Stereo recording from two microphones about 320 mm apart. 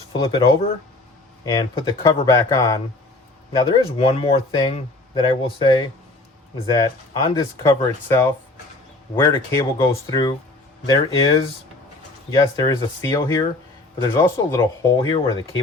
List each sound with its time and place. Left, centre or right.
0.1 s speech: centre